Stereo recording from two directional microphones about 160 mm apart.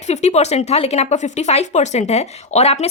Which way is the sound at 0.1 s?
45° left (ahead or behind).